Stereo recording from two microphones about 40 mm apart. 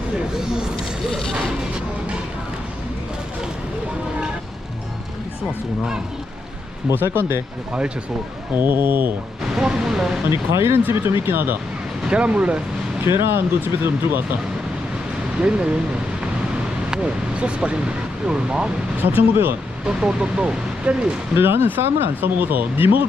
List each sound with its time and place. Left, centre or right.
0.3 s speech: centre
7.1 s speech: right
8.5 s speech: right
9.6 s speech: centre
10.2 s speech: right
10.9 s speech: right
12.0 s speech: right
13.1 s speech: right
15.4 s speech: right
16.9 s speech: right
19.0 s speech: right
19.8 s speech: right
21.3 s speech: right